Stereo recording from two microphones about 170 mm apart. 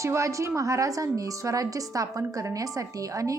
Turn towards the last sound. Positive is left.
turn(degrees=-20)  # may be behind; listen again after turning